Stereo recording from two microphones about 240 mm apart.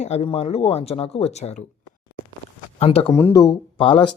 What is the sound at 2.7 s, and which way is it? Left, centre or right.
Speech, left.